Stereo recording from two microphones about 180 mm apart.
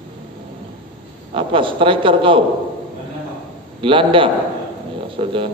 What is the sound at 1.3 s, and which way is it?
A man's voice, 30° right (ahead or behind).